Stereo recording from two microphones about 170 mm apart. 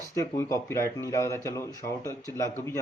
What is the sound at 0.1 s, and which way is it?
Speech, 20° left (ahead or behind).